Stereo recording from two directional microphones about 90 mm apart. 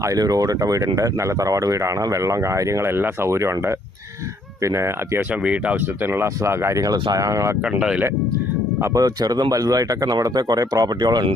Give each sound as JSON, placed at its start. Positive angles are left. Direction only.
{"t": 0.0, "sound": "speech", "side_deg": -40}
{"t": 5.3, "sound": "speech", "side_deg": -15}
{"t": 6.2, "sound": "speech", "side_deg": -30}
{"t": 7.6, "sound": "speech", "side_deg": -10}
{"t": 8.8, "sound": "speech", "side_deg": -40}